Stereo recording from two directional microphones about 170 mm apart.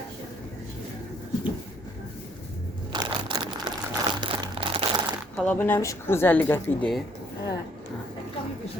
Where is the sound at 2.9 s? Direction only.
25° right (ahead or behind).